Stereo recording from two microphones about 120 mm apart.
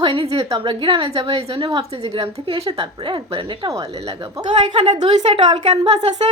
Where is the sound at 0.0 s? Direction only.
50° right (ahead or behind).